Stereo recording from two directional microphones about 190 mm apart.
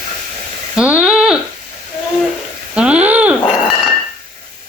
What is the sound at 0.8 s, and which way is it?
Speech, 5° right (ahead or behind).